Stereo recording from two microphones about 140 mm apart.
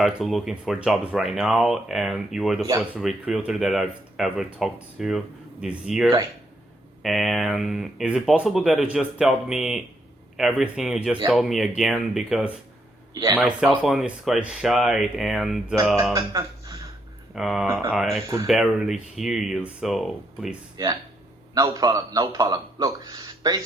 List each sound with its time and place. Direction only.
0.0 s speech: centre (ahead or behind)
2.6 s speech: 15° right (ahead or behind)
3.0 s speech: 5° right (ahead or behind)
13.7 s speech: centre (ahead or behind)
16.3 s speech: 30° right (ahead or behind)
17.3 s speech: centre (ahead or behind)
20.7 s speech: 30° right (ahead or behind)